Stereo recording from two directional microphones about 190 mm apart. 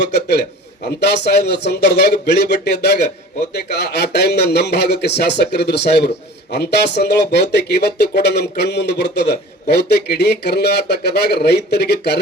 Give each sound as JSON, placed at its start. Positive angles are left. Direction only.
{"t": 0.0, "sound": "a man's voice", "side_deg": 60}